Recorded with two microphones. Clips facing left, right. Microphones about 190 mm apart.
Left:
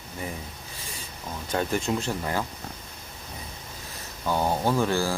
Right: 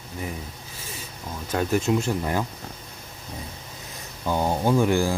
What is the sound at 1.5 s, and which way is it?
Speech, 5° right (ahead or behind).